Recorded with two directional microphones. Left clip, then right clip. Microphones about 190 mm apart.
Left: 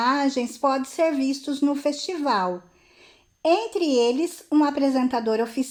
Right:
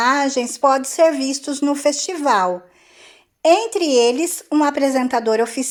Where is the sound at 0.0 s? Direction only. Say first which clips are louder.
Right 5 dB; 20° right (ahead or behind).